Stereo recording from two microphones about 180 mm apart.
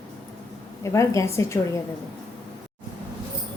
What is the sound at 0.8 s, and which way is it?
Speech, 15° left (ahead or behind).